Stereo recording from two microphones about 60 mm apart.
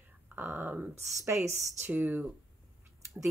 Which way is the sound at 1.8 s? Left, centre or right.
Right.